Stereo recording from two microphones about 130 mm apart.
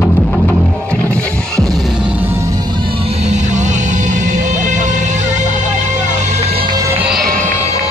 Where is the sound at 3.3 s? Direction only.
65° right (ahead or behind).